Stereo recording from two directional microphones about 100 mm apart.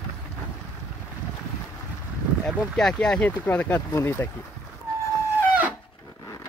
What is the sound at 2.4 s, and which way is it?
Speech, 5° left (ahead or behind).